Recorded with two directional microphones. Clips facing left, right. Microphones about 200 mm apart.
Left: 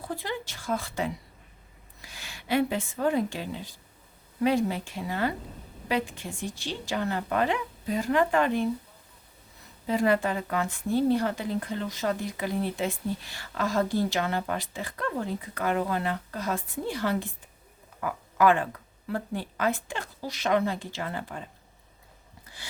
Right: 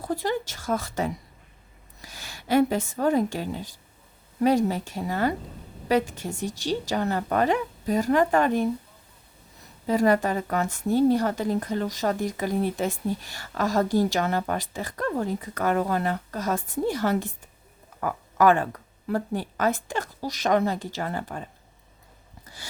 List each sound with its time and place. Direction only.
0.0 s a woman's voice: 40° right (ahead or behind)
9.8 s a woman's voice: 40° right (ahead or behind)